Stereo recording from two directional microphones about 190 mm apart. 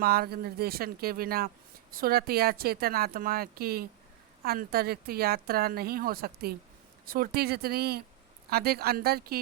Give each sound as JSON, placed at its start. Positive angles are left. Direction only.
{"t": 0.0, "sound": "speech", "side_deg": -55}